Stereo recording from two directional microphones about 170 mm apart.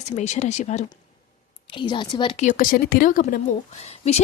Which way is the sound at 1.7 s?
25° left (ahead or behind).